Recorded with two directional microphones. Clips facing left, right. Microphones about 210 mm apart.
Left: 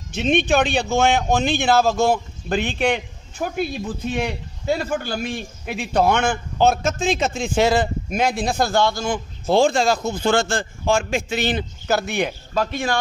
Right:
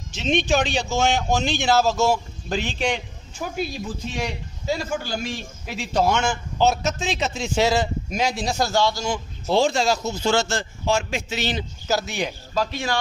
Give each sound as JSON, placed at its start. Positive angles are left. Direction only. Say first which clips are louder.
{"t": 0.1, "sound": "speech", "louder": "left 3 dB", "side_deg": 55}